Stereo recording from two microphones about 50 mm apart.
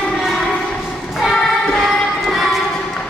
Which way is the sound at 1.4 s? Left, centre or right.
Centre.